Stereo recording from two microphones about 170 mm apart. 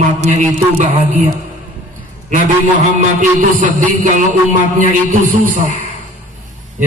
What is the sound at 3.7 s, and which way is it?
A man's voice, 50° right (ahead or behind).